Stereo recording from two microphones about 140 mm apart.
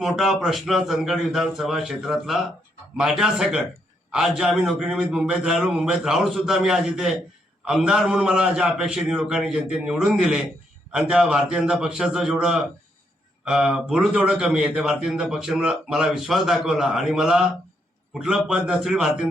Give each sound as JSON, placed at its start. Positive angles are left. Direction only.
{"t": 0.0, "sound": "a man's voice", "side_deg": 0}